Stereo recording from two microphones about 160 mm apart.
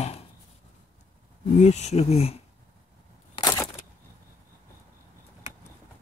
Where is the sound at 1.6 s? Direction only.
45° left (ahead or behind).